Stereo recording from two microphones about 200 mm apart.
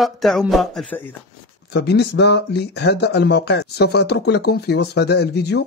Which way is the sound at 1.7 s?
55° left (ahead or behind).